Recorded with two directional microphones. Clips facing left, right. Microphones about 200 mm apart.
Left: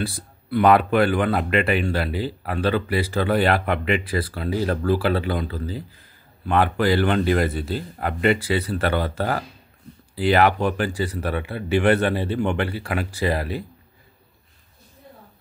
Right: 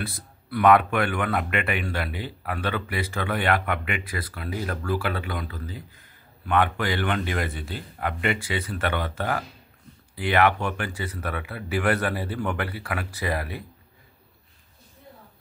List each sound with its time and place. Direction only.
0.0 s speech: 30° left (ahead or behind)